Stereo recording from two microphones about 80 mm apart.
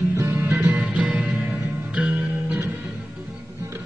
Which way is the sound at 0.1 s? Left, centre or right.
Right.